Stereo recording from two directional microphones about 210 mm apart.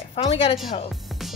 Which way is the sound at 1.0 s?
Centre (ahead or behind).